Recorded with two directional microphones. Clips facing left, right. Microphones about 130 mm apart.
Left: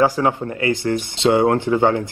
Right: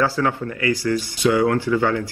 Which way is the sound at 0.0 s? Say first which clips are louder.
Left 3 dB; 15° left (ahead or behind).